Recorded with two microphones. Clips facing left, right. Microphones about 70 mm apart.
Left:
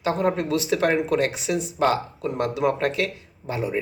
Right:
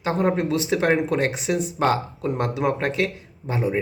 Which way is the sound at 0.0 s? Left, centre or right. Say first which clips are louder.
Right 1 dB; right.